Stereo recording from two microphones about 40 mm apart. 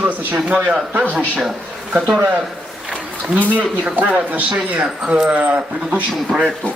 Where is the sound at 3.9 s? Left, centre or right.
Right.